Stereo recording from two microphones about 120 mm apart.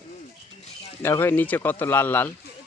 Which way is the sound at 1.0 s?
20° left (ahead or behind).